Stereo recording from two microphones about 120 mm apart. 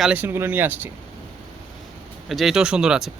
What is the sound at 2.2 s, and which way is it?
Speech, centre (ahead or behind).